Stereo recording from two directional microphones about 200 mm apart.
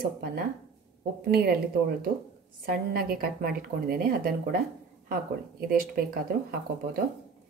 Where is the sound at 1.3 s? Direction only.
50° right (ahead or behind).